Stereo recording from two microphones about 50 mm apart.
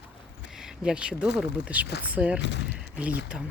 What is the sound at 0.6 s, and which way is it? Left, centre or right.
Speech, centre.